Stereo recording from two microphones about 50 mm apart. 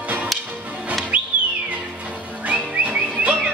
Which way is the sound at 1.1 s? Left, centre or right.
Right.